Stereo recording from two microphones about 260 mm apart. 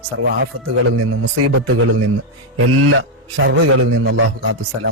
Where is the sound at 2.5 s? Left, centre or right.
Right.